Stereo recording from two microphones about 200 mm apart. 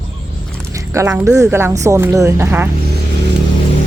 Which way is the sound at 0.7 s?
15° right (ahead or behind).